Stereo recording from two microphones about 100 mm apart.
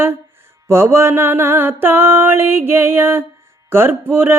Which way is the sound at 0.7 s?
25° right (ahead or behind).